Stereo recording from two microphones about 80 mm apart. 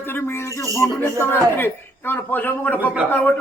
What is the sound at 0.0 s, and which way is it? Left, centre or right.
A man's voice, left.